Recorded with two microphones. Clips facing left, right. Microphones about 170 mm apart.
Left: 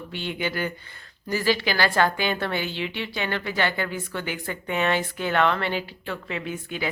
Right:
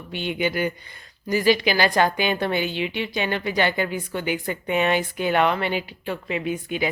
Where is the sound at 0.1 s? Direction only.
15° right (ahead or behind).